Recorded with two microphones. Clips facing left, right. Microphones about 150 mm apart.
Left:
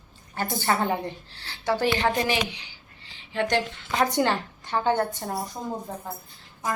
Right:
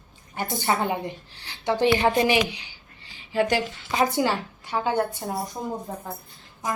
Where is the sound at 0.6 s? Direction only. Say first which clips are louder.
Even; 15° right (ahead or behind).